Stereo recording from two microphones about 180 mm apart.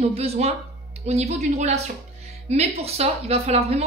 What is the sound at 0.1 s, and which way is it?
A woman's voice, 35° right (ahead or behind).